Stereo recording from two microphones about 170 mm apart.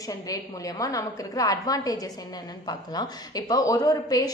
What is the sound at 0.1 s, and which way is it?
A woman's voice, 20° left (ahead or behind).